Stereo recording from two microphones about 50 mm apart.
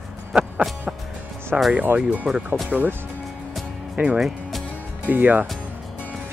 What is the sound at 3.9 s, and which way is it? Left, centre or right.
Speech, right.